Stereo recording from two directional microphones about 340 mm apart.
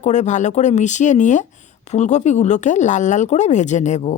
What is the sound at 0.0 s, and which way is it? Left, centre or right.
Speech, left.